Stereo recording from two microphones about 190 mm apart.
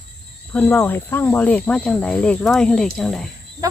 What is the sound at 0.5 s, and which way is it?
Speech, 15° left (ahead or behind).